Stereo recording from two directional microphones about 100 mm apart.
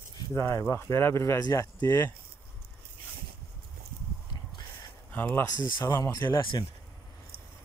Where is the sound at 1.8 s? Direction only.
30° left (ahead or behind).